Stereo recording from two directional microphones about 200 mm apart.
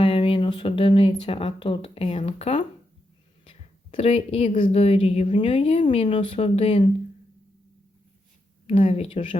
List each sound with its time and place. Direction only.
0.0 s speech: 25° left (ahead or behind)
8.6 s speech: 30° left (ahead or behind)